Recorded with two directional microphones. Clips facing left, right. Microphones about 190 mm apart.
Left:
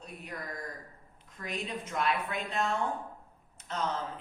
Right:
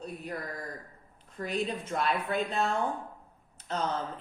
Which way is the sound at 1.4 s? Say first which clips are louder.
Right 5 dB; 35° right (ahead or behind).